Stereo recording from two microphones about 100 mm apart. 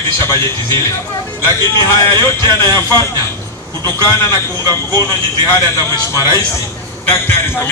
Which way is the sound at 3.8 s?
30° left (ahead or behind).